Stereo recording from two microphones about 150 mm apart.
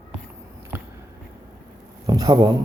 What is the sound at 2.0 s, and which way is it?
Speech, 25° right (ahead or behind).